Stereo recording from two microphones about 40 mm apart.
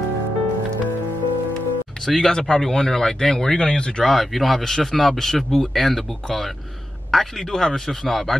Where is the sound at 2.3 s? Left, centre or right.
Centre.